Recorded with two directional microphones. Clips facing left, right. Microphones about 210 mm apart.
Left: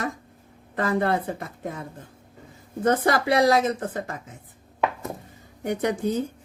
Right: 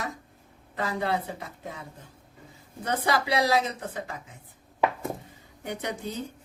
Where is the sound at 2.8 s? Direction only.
50° left (ahead or behind).